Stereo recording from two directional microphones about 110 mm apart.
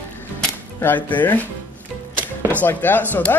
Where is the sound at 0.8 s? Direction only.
15° left (ahead or behind).